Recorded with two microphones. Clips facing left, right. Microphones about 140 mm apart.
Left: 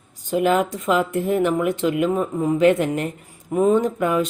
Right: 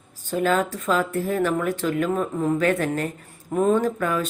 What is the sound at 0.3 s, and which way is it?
Speech, 15° left (ahead or behind).